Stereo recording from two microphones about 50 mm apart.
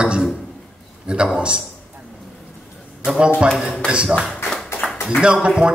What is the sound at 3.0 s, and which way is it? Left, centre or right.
A man's voice, centre.